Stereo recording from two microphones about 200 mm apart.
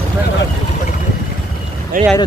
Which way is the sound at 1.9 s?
45° right (ahead or behind).